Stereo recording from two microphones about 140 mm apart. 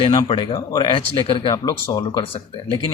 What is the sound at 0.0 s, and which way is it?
Speech, 25° left (ahead or behind).